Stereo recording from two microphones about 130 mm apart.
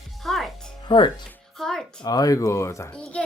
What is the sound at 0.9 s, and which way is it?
Speech, 40° left (ahead or behind).